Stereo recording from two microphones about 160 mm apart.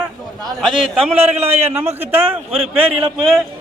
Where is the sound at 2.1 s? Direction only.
15° right (ahead or behind).